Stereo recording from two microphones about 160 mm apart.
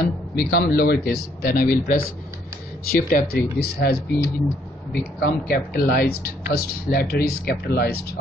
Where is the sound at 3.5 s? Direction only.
75° left (ahead or behind).